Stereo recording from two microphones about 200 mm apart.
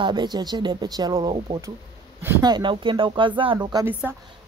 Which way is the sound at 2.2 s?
10° right (ahead or behind).